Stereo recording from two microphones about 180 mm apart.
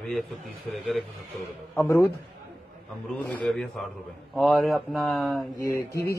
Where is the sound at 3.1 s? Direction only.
10° left (ahead or behind).